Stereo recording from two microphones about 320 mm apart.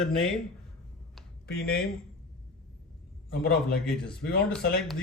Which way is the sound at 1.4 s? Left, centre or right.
Left.